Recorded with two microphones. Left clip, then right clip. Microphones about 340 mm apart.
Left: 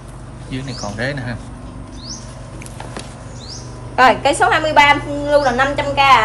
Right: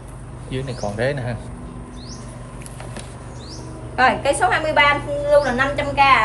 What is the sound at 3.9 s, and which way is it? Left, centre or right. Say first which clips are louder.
A woman's voice: left 5 dB; centre.